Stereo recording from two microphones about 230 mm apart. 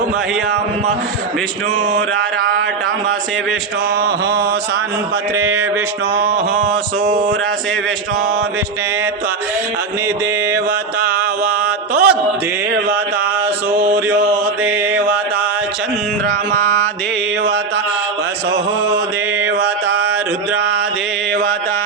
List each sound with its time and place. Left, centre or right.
2.4 s a sound: right
5.4 s speech: centre
6.1 s mantra: right
11.4 s music: centre
14.3 s mantra: centre